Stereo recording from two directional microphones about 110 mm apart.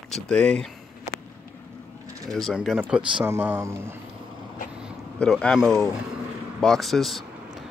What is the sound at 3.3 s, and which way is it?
Speech, 20° right (ahead or behind).